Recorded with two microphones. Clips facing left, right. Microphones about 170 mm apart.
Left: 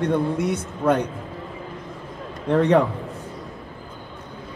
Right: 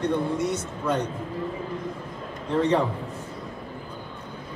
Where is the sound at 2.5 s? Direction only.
60° left (ahead or behind).